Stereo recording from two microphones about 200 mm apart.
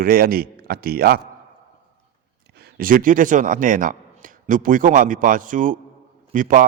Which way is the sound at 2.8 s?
45° right (ahead or behind).